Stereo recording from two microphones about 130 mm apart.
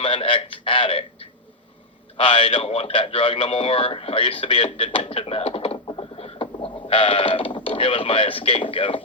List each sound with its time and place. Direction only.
0.0 s a man's voice: 45° left (ahead or behind)